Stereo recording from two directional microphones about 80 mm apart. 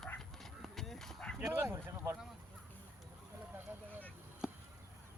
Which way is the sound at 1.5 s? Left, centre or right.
Right.